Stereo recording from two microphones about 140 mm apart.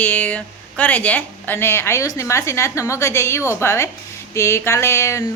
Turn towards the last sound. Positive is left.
turn(degrees=20)  # may be behind; listen again after turning